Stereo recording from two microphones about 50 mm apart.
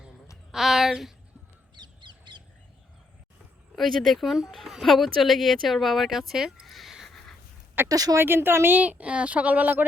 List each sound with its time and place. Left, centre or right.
0.5 s speech: centre
3.8 s speech: centre
6.7 s a sound: centre
7.1 s writing: centre
7.8 s speech: right
8.8 s speech: right